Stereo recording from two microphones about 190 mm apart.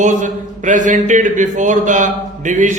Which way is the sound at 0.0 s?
40° right (ahead or behind).